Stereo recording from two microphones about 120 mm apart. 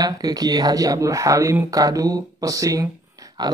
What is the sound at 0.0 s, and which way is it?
Speech, 30° right (ahead or behind).